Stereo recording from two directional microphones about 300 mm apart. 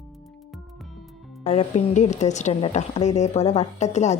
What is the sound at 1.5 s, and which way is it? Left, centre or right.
A woman's voice, left.